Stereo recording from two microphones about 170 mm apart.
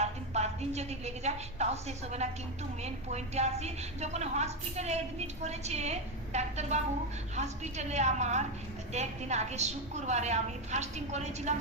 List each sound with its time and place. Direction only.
0.0 s a woman's voice: 40° right (ahead or behind)